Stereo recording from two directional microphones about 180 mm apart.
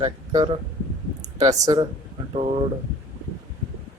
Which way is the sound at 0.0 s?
20° right (ahead or behind).